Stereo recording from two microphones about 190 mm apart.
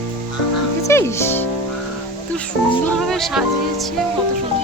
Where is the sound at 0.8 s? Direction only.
15° left (ahead or behind).